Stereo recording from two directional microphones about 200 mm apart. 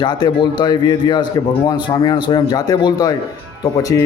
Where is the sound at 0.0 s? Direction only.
20° left (ahead or behind).